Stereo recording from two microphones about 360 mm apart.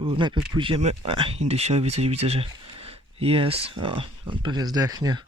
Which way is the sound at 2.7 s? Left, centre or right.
Centre.